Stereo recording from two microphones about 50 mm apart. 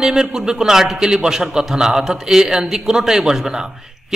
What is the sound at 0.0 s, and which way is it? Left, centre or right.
A man's voice, centre.